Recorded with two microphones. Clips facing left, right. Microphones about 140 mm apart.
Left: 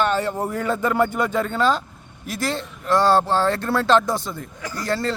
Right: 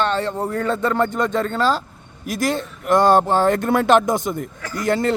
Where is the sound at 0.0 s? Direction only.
10° left (ahead or behind).